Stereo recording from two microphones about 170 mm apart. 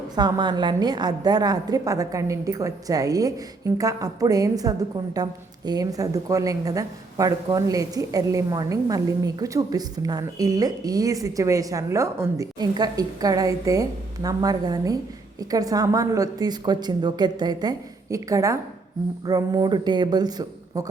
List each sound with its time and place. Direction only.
0.2 s a woman's voice: 25° right (ahead or behind)